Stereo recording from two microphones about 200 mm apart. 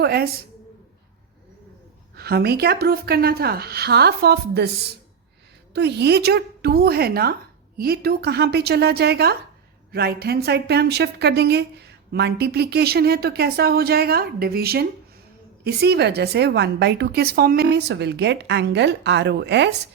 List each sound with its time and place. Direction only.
0.0 s a woman's voice: 50° right (ahead or behind)
2.1 s a woman's voice: 50° right (ahead or behind)